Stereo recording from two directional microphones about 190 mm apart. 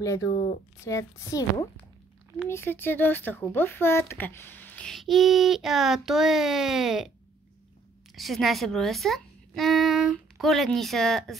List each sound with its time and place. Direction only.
0.0 s a woman's voice: 15° left (ahead or behind); by 7.1 s centre (ahead or behind)
8.1 s speech: centre (ahead or behind)